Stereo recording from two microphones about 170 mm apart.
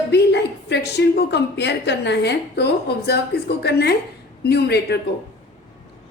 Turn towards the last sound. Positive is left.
turn(degrees=75)  # may be behind; listen again after turning